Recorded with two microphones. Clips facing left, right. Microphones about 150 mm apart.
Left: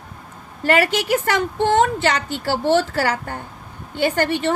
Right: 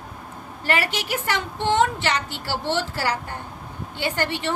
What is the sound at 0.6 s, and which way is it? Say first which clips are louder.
A woman's voice: left 7 dB; 50° left (ahead or behind).